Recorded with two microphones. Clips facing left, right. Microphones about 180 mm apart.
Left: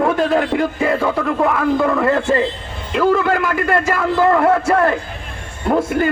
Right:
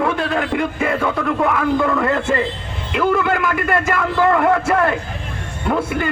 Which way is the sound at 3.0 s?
40° left (ahead or behind).